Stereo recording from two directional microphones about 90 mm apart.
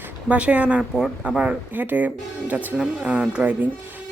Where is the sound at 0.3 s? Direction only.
15° right (ahead or behind).